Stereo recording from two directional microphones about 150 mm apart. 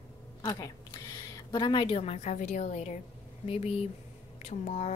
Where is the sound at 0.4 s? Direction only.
25° left (ahead or behind).